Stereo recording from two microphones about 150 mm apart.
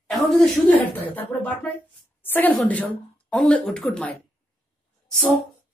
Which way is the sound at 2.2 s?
10° left (ahead or behind).